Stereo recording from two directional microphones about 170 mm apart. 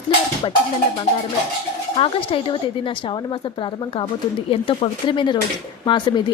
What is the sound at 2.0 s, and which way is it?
Speech, 30° left (ahead or behind).